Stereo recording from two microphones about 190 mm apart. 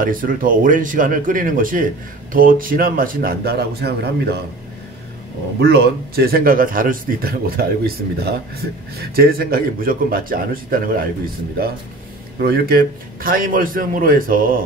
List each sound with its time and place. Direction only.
0.0 s a man's voice: 45° right (ahead or behind)
5.6 s a man's voice: 55° right (ahead or behind)
12.4 s a man's voice: 55° right (ahead or behind)